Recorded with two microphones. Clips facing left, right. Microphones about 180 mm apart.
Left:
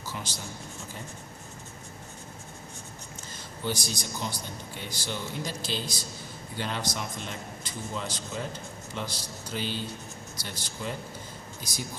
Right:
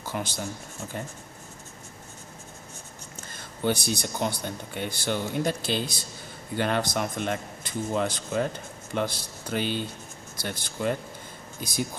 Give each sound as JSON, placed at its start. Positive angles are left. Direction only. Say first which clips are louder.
{"t": 0.0, "sound": "speech", "louder": "right 6 dB", "side_deg": -55}
{"t": 3.3, "sound": "speech", "louder": "right 6 dB", "side_deg": -55}